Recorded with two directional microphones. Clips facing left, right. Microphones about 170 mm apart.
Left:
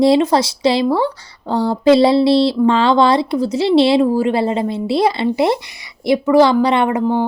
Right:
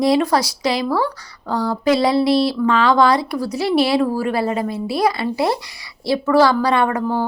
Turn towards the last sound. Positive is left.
turn(degrees=20)  # may be behind; listen again after turning